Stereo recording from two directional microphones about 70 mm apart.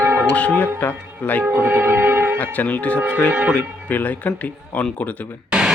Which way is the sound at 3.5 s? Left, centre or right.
Left.